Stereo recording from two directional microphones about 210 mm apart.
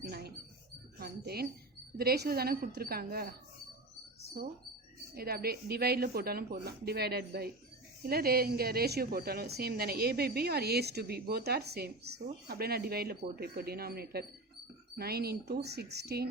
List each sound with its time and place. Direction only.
0.1 s rodents: 50° right (ahead or behind)
0.9 s a sound: 45° right (ahead or behind)
2.0 s speech: 45° right (ahead or behind)
5.1 s speech: 45° right (ahead or behind)